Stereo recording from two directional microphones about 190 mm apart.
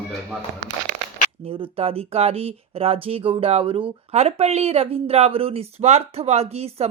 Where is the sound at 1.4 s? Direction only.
30° right (ahead or behind).